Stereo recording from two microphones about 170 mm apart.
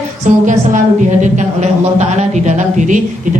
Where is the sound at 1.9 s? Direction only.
45° right (ahead or behind).